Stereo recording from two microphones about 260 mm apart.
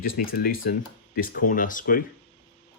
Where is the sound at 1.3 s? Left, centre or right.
Left.